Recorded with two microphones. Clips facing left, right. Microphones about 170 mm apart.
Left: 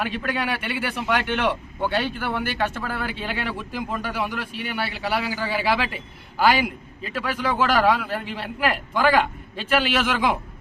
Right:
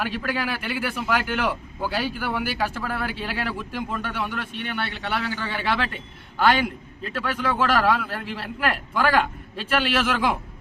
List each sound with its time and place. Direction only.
0.0 s a man's voice: centre (ahead or behind)